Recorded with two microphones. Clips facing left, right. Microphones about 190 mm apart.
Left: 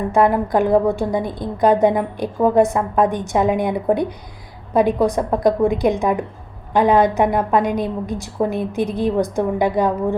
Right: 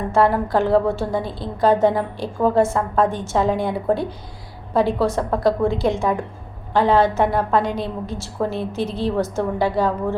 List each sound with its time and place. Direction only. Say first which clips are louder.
0.1 s a woman's voice: left 1 dB; 15° left (ahead or behind)